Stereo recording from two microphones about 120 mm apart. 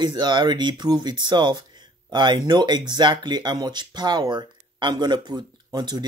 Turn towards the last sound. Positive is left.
turn(degrees=-35)  # may be behind; listen again after turning